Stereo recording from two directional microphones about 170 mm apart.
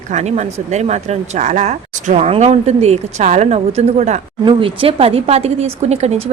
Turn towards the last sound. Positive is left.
turn(degrees=-40)  # may be behind; listen again after turning